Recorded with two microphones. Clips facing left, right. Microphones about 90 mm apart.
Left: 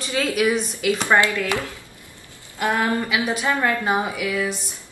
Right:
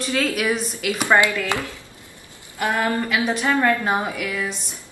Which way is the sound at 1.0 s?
15° right (ahead or behind).